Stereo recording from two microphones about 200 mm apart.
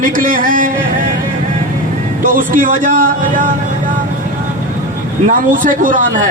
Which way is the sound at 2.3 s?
45° right (ahead or behind).